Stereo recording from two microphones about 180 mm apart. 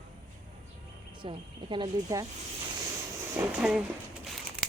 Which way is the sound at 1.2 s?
25° right (ahead or behind).